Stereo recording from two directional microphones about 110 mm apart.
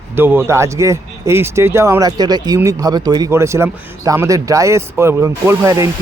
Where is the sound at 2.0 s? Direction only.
40° right (ahead or behind).